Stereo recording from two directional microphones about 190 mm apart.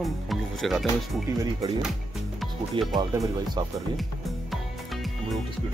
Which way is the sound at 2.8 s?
25° right (ahead or behind).